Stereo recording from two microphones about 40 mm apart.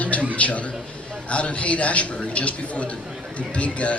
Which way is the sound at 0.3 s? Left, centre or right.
Left.